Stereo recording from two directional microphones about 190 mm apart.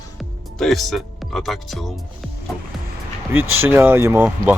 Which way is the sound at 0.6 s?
Centre (ahead or behind).